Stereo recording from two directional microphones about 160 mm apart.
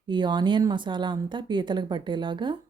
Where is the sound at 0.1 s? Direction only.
30° right (ahead or behind).